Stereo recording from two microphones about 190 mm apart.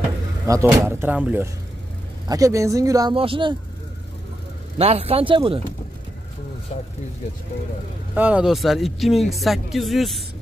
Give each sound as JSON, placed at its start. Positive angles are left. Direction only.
{"t": 0.5, "sound": "speech", "side_deg": -15}
{"t": 4.7, "sound": "speech", "side_deg": -30}
{"t": 8.1, "sound": "speech", "side_deg": -5}